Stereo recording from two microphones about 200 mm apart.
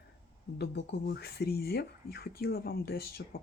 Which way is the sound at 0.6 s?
55° left (ahead or behind).